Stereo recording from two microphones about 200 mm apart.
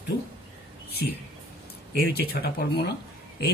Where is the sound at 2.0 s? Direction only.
55° left (ahead or behind).